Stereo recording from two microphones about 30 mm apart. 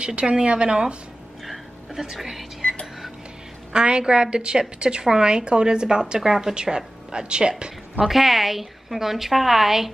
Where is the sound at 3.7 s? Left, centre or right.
Right.